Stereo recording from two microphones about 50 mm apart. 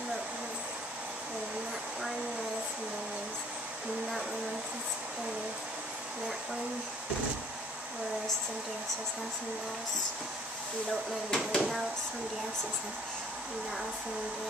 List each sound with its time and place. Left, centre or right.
11.2 s speech: centre